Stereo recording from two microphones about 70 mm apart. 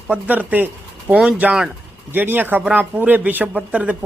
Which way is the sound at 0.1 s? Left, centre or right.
Right.